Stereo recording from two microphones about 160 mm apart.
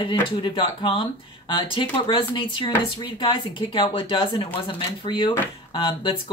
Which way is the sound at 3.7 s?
30° left (ahead or behind).